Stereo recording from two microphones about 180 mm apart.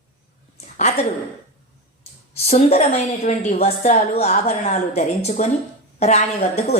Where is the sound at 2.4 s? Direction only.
35° left (ahead or behind).